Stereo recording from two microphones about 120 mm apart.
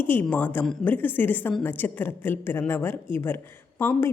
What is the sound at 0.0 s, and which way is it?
A woman's voice, 15° left (ahead or behind).